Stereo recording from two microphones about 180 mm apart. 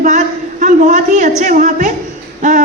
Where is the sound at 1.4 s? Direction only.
45° right (ahead or behind).